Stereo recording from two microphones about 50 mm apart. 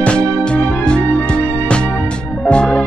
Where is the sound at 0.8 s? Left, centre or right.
Left.